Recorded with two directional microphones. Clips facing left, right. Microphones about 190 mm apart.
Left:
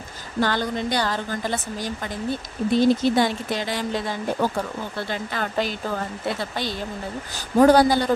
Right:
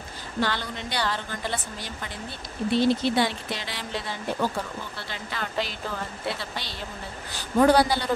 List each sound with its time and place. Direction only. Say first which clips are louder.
0.4 s speech: left 6 dB; 45° left (ahead or behind)